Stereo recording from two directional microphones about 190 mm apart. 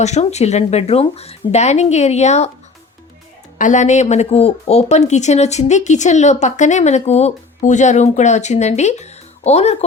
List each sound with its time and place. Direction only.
0.0 s speech: 35° left (ahead or behind)
3.6 s speech: 40° left (ahead or behind)